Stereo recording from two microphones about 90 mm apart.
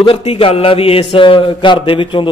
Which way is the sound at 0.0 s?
90° left.